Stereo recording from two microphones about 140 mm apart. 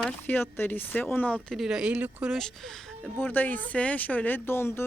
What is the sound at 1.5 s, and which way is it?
Speech, 5° right (ahead or behind).